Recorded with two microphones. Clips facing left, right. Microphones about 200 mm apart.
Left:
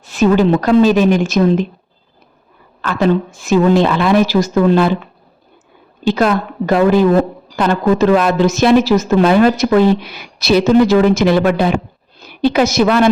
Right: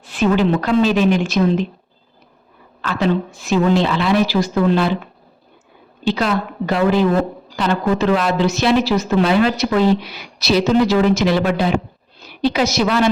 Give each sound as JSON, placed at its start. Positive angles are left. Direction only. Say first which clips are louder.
{"t": 0.0, "sound": "a woman's voice", "louder": "left 4 dB", "side_deg": 45}
{"t": 2.8, "sound": "a woman's voice", "louder": "left 4 dB", "side_deg": 50}
{"t": 6.1, "sound": "a woman's voice", "louder": "left 5 dB", "side_deg": 50}